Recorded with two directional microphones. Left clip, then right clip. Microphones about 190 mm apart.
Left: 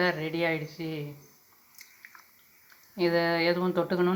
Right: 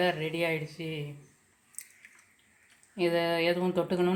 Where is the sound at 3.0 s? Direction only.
5° left (ahead or behind).